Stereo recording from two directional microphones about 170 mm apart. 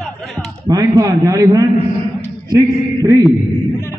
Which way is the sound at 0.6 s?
20° right (ahead or behind).